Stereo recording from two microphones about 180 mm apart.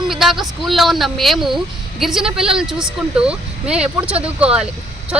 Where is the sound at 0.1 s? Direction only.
Centre (ahead or behind).